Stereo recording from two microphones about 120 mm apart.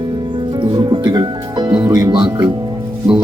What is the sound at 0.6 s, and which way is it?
Music, 35° right (ahead or behind).